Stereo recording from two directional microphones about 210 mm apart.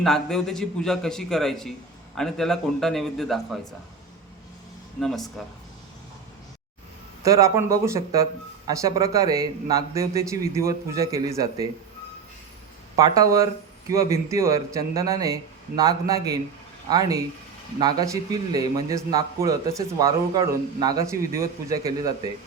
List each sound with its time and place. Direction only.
0.0 s a man's voice: centre (ahead or behind)
4.9 s a man's voice: centre (ahead or behind)
7.2 s speech: 15° right (ahead or behind)
13.0 s speech: 15° right (ahead or behind)